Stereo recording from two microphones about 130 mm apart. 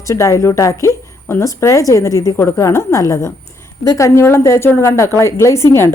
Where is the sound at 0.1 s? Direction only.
25° left (ahead or behind).